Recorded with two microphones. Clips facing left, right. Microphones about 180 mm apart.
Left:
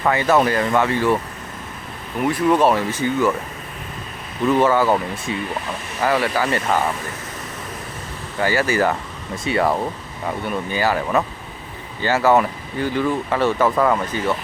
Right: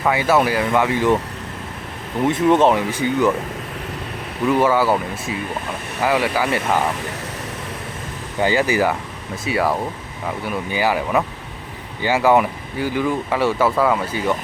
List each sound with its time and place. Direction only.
0.0 s speech: 10° right (ahead or behind)
2.2 s speech: 20° right (ahead or behind)
4.4 s speech: 10° right (ahead or behind)
8.4 s speech: 15° right (ahead or behind)